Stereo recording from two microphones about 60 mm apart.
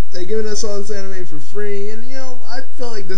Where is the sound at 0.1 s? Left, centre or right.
Centre.